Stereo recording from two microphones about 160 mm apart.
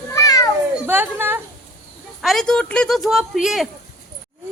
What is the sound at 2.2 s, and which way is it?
Speech, centre (ahead or behind).